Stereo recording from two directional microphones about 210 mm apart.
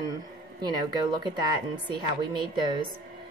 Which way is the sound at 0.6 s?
20° right (ahead or behind).